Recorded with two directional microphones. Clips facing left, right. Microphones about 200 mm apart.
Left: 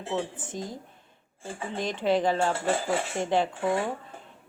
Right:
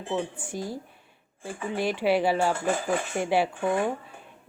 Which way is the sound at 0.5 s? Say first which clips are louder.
Right 3 dB; 20° left (ahead or behind).